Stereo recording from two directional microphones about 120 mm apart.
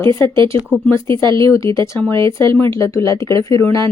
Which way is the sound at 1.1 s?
40° right (ahead or behind).